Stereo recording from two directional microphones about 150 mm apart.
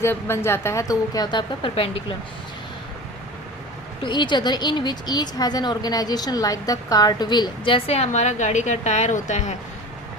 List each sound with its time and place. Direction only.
0.0 s a woman's voice: 15° left (ahead or behind); by 2.1 s 40° left (ahead or behind)
4.0 s a woman's voice: 30° left (ahead or behind); by 9.6 s 50° left (ahead or behind)